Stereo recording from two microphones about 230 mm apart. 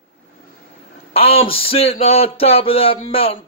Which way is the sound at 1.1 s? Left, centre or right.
Left.